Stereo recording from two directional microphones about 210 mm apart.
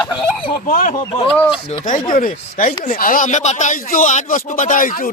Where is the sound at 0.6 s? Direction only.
40° left (ahead or behind).